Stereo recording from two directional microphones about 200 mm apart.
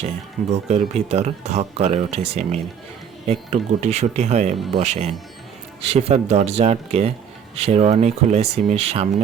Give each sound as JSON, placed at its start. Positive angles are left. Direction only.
{"t": 0.5, "sound": "speech", "side_deg": -35}